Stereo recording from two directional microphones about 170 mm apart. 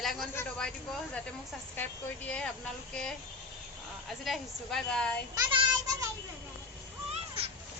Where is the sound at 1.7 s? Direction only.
10° left (ahead or behind).